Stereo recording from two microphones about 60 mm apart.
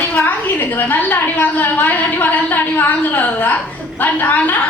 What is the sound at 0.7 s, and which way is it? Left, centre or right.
A woman's voice, left.